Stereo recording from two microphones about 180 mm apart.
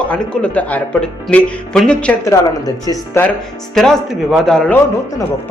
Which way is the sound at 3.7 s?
Centre (ahead or behind).